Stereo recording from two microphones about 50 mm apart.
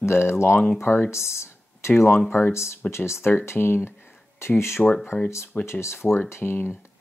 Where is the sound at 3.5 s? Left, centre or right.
Left.